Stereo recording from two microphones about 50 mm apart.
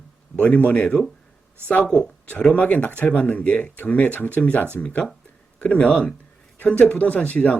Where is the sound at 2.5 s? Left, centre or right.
Left.